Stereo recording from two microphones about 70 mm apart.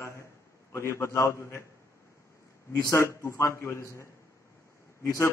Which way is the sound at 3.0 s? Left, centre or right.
Left.